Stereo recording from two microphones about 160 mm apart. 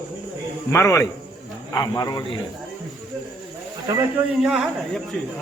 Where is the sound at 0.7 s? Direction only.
15° left (ahead or behind).